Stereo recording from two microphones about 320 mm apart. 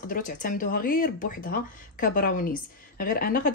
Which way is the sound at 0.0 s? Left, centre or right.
Left.